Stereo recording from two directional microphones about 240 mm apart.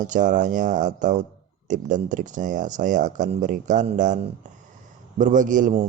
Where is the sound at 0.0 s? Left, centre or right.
Right.